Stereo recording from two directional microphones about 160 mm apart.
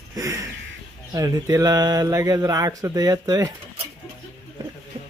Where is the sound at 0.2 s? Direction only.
20° right (ahead or behind).